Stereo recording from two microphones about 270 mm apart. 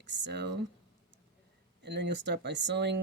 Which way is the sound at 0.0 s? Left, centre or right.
Right.